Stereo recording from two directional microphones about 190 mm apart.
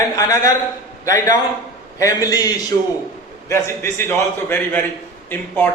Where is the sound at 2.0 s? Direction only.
15° left (ahead or behind).